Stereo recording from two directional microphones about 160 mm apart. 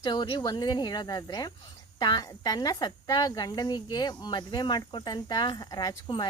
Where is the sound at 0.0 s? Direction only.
25° left (ahead or behind).